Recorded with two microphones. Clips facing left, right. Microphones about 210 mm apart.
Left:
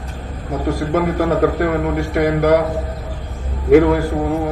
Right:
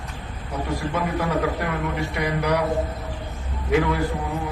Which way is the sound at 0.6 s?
50° left (ahead or behind).